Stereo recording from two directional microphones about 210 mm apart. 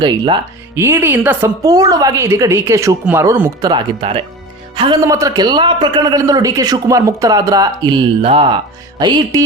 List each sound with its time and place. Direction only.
0.8 s a woman's voice: 10° right (ahead or behind)
3.7 s a man's voice: 25° right (ahead or behind)